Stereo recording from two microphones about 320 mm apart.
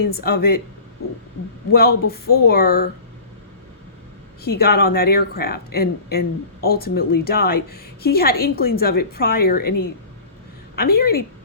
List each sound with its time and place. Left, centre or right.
0.1 s speech: left
1.0 s hoot: left
1.7 s speech: left
4.4 s speech: left